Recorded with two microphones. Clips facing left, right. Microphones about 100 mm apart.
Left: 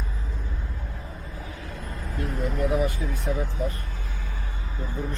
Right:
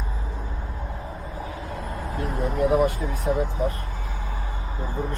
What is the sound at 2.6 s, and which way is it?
Speech, 60° right (ahead or behind).